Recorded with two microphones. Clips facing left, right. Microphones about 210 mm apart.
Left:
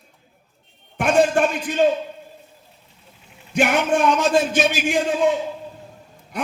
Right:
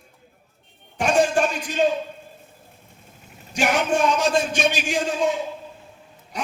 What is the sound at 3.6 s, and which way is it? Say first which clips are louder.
Speech: left 4 dB; 55° left (ahead or behind).